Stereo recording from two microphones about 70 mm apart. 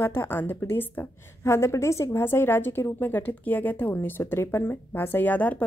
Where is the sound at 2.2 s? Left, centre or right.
Left.